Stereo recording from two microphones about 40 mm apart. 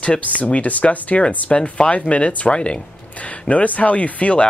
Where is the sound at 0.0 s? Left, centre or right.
Left.